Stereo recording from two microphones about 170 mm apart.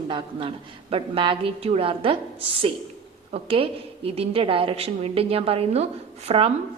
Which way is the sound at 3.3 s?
35° right (ahead or behind).